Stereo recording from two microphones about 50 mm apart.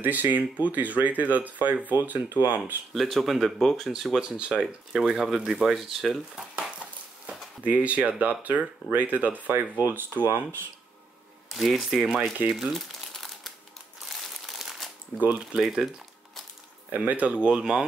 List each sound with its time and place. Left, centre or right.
0.0 s speech: right
2.9 s speech: centre
7.6 s speech: right
11.4 s speech: centre
12.4 s crumpling: centre
15.6 s speech: centre
16.9 s speech: right; by 17.8 s centre